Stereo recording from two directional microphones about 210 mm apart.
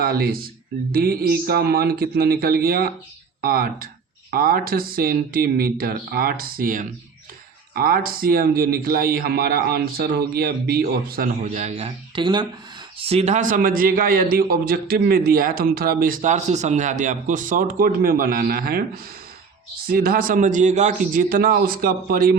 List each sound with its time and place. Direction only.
0.0 s a man's voice: 45° right (ahead or behind)
19.9 s a man's voice: 45° right (ahead or behind)